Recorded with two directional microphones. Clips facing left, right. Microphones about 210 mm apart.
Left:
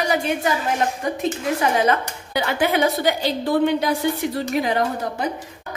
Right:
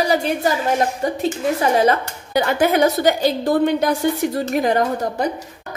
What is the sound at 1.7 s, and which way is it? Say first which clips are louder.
A woman's voice: right 3 dB; 35° right (ahead or behind).